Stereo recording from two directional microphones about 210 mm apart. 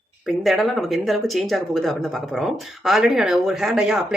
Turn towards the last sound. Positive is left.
turn(degrees=0)  # may be behind; listen again after turning